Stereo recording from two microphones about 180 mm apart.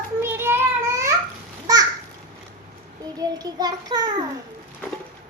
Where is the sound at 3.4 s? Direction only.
20° right (ahead or behind).